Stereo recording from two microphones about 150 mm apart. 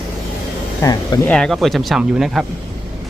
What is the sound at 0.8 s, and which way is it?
Speech, 20° left (ahead or behind).